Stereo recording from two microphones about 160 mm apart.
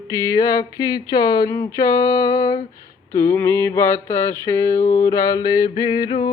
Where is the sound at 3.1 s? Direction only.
15° left (ahead or behind).